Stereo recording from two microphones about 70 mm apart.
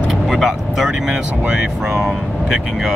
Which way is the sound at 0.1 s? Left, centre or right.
Centre.